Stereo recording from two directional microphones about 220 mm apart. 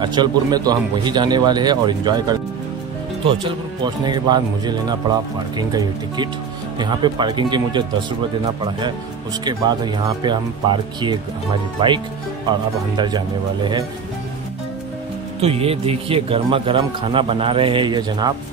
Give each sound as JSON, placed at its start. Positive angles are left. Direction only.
{"t": 0.0, "sound": "a man's voice", "side_deg": -20}
{"t": 9.4, "sound": "a man's voice", "side_deg": -20}
{"t": 12.9, "sound": "a man's voice", "side_deg": -20}
{"t": 15.4, "sound": "a man's voice", "side_deg": -25}